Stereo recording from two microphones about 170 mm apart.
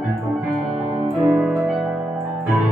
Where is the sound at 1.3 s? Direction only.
Centre (ahead or behind).